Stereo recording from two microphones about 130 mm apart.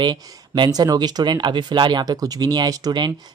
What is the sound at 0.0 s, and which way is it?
Speech, 35° right (ahead or behind).